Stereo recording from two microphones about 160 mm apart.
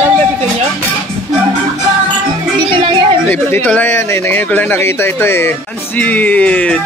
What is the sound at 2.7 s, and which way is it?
Speech, 35° right (ahead or behind).